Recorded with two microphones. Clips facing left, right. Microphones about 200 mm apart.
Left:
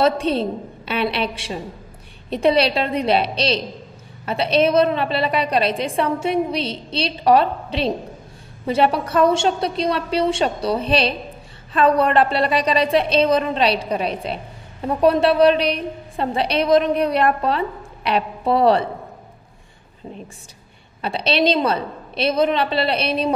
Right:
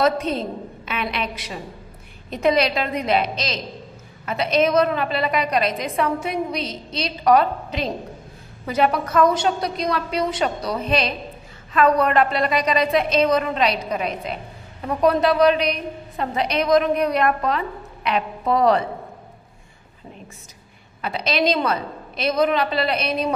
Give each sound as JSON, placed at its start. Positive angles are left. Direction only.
{"t": 0.0, "sound": "a woman's voice", "side_deg": 30}
{"t": 21.0, "sound": "a woman's voice", "side_deg": 30}